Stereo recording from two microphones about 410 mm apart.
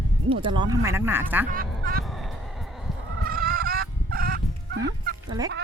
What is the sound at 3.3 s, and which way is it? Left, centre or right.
Fowl, right.